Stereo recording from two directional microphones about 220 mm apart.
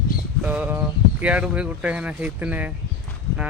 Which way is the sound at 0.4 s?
5° right (ahead or behind).